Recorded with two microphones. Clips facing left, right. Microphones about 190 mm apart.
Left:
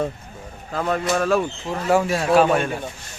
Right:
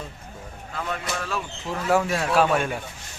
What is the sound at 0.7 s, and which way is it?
Speech, 45° left (ahead or behind).